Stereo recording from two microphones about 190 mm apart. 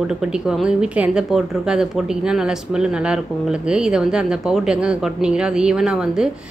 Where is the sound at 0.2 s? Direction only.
5° right (ahead or behind).